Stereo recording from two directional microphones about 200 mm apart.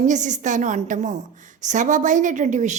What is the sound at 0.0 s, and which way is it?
A woman's voice, 40° right (ahead or behind).